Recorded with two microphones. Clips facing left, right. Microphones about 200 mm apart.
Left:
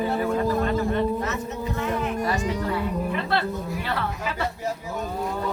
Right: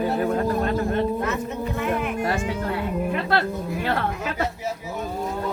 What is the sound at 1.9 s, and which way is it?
Music, 50° right (ahead or behind).